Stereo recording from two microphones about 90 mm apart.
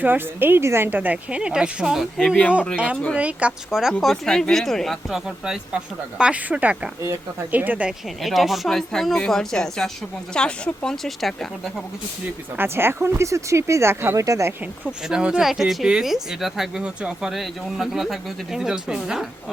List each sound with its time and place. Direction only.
0.0 s a woman's voice: 20° right (ahead or behind); by 2.4 s centre (ahead or behind)
2.7 s a woman's voice: 15° right (ahead or behind)
4.0 s speech: 5° left (ahead or behind); by 7.9 s 20° right (ahead or behind)
7.9 s speech: centre (ahead or behind)
12.5 s speech: 25° right (ahead or behind)
14.8 s speech: 10° right (ahead or behind)